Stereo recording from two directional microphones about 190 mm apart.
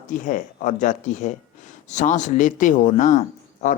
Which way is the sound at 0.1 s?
40° left (ahead or behind).